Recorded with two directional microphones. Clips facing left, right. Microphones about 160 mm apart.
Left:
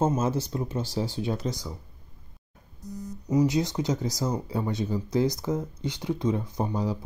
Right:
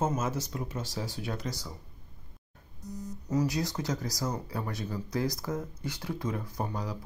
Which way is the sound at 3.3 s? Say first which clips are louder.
Left 6 dB; 20° left (ahead or behind).